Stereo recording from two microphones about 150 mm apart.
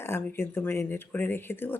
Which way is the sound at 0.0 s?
15° left (ahead or behind).